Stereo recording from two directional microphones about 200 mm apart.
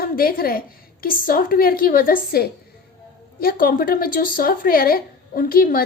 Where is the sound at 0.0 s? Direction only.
45° left (ahead or behind).